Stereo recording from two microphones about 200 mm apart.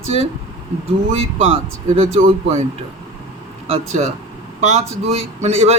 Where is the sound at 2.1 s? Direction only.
30° right (ahead or behind).